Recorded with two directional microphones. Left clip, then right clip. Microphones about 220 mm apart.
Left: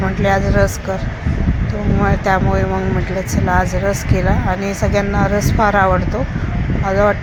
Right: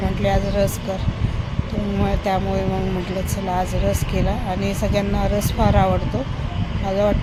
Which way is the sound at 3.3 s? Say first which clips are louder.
Left 7 dB; 5° left (ahead or behind).